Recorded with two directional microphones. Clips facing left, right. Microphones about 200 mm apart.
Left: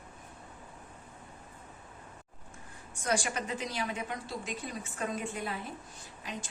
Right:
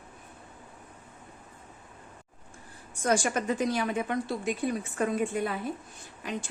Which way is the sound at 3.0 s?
45° right (ahead or behind).